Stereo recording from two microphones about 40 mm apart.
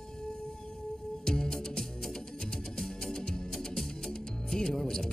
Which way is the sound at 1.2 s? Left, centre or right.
Centre.